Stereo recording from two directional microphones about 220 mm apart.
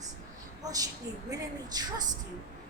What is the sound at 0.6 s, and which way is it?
A woman's voice, 15° right (ahead or behind).